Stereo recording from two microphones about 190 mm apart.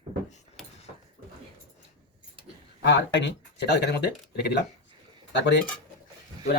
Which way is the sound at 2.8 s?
65° left (ahead or behind).